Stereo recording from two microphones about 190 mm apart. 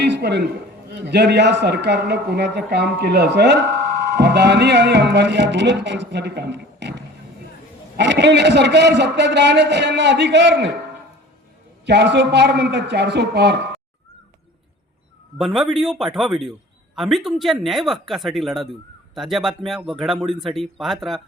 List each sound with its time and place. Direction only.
0.0 s a man's voice: 60° right (ahead or behind)
11.9 s a man's voice: 65° right (ahead or behind)
15.4 s speech: centre (ahead or behind)